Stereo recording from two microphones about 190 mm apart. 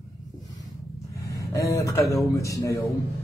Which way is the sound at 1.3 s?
15° left (ahead or behind).